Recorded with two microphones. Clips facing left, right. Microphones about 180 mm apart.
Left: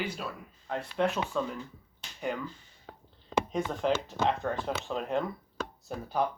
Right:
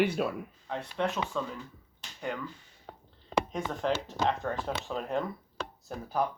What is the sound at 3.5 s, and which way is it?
Speech, centre (ahead or behind).